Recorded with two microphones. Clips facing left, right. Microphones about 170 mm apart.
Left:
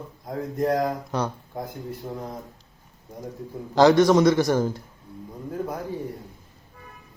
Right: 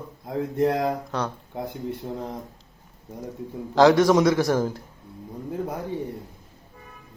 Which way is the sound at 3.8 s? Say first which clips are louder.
Even; 5° right (ahead or behind).